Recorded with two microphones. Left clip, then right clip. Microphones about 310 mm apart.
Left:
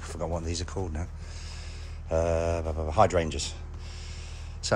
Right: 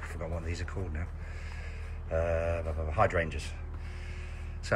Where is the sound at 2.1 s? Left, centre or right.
Centre.